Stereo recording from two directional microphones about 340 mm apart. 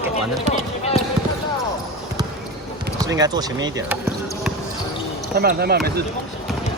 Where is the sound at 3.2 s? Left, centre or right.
Centre.